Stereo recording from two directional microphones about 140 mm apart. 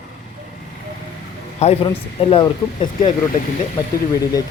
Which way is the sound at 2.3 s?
35° left (ahead or behind).